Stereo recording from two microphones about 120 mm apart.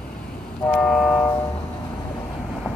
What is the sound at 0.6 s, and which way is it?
Train, 5° left (ahead or behind).